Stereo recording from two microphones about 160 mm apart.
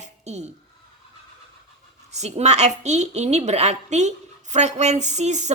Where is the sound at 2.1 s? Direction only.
45° right (ahead or behind).